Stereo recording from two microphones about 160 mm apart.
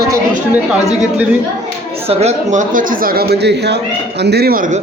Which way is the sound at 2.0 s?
45° right (ahead or behind).